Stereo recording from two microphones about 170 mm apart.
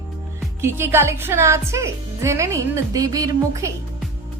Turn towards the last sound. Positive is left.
turn(degrees=-20)  # may be behind; listen again after turning